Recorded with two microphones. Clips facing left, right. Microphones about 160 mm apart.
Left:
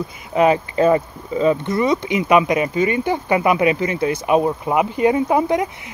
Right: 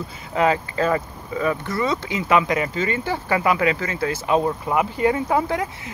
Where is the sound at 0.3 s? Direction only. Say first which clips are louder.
Left 4 dB; 20° left (ahead or behind).